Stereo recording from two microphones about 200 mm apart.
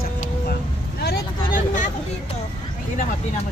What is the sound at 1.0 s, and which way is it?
Vehicle, 45° left (ahead or behind).